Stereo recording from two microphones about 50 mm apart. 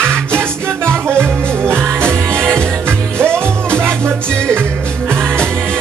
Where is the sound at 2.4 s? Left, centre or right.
Centre.